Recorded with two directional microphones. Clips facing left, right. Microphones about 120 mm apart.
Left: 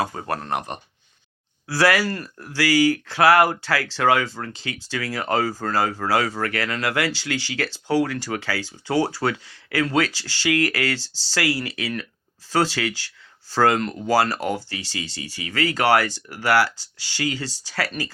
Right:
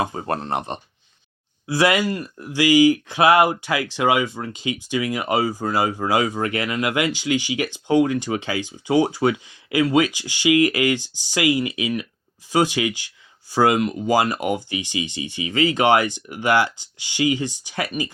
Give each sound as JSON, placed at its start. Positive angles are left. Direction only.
{"t": 0.0, "sound": "speech", "side_deg": -25}